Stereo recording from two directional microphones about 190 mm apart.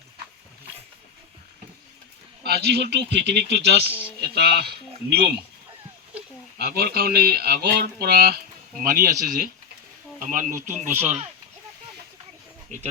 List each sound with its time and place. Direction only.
2.4 s speech: 60° right (ahead or behind)
6.6 s speech: 55° right (ahead or behind)
12.7 s speech: 40° right (ahead or behind)